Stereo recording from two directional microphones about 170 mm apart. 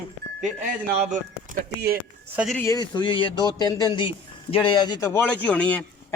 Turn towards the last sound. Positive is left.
turn(degrees=10)  # may be behind; listen again after turning